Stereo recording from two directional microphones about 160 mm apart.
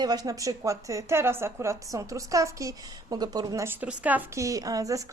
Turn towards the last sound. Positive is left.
turn(degrees=-20)  # may be behind; listen again after turning